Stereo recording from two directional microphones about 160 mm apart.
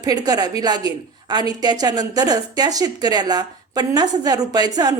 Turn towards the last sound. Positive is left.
turn(degrees=-25)  # may be behind; listen again after turning